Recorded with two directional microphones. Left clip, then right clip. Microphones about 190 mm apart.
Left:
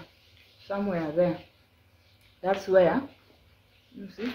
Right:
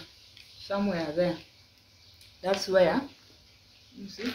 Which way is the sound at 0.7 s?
25° left (ahead or behind).